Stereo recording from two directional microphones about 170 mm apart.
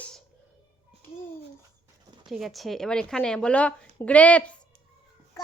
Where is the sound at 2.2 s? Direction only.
Centre (ahead or behind).